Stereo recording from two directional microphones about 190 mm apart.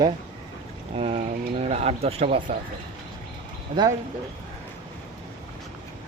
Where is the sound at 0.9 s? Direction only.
30° right (ahead or behind).